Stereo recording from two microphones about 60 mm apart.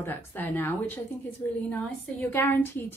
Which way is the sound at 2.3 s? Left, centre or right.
Left.